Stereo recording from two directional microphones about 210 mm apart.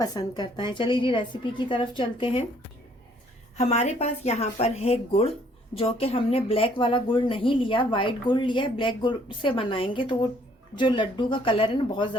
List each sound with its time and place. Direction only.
0.0 s speech: 20° left (ahead or behind)
3.7 s speech: 30° left (ahead or behind)